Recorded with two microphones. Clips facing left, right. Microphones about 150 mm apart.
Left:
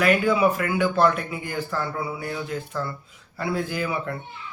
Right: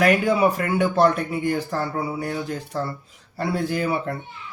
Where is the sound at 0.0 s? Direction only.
40° right (ahead or behind).